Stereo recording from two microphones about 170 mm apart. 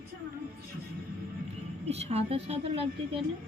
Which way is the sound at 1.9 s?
40° right (ahead or behind).